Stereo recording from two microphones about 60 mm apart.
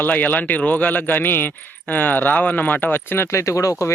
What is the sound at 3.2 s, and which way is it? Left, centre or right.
Speech, left.